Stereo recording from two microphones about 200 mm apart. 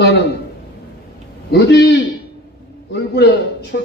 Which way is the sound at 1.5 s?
55° left (ahead or behind).